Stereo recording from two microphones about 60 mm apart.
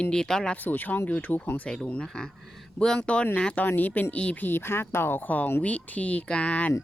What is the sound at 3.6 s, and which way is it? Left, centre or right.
Speech, left.